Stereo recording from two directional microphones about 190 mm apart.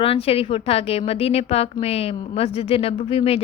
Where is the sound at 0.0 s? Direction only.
30° left (ahead or behind).